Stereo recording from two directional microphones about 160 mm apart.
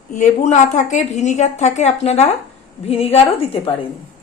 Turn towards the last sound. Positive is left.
turn(degrees=35)  # may be behind; listen again after turning